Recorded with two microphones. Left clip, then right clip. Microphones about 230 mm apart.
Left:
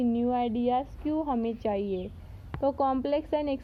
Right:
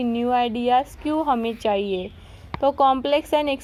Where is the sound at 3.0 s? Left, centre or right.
Centre.